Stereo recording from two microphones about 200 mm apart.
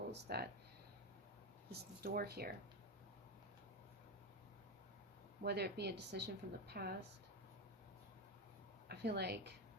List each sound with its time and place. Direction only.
0.1 s speech: 55° right (ahead or behind)
1.7 s speech: 50° right (ahead or behind)
5.4 s speech: 55° right (ahead or behind)
8.9 s speech: 55° right (ahead or behind)